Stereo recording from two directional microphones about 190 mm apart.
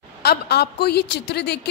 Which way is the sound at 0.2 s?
60° left (ahead or behind).